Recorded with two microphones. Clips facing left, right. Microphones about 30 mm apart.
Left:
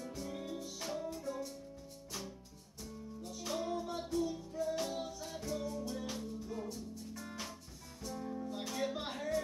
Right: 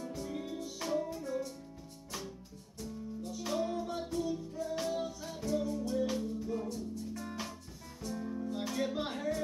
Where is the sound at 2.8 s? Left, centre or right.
Centre.